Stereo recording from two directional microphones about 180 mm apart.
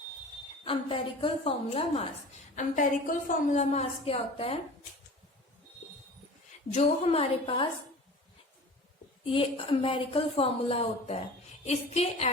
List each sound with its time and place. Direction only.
0.6 s a woman's voice: 30° left (ahead or behind)
2.6 s a woman's voice: 50° left (ahead or behind)
6.7 s a woman's voice: 35° left (ahead or behind)
9.2 s a woman's voice: 30° left (ahead or behind)